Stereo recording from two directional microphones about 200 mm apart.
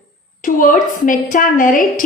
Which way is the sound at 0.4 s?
40° left (ahead or behind).